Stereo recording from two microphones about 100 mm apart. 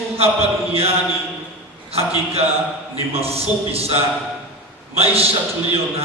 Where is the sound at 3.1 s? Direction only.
80° right.